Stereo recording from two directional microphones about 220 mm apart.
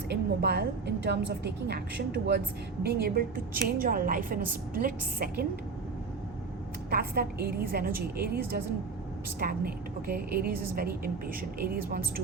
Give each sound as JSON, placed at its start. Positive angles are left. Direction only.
{"t": 0.1, "sound": "a woman's voice", "side_deg": -45}
{"t": 6.9, "sound": "a woman's voice", "side_deg": -45}
{"t": 9.4, "sound": "a woman's voice", "side_deg": -40}